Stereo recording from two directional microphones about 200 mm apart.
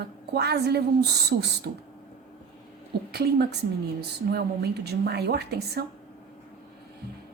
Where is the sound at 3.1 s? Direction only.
55° right (ahead or behind).